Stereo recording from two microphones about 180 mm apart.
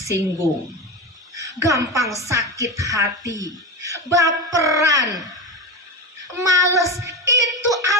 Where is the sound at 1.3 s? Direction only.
20° right (ahead or behind).